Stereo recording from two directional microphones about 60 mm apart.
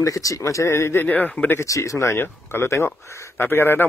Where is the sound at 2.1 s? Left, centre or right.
Left.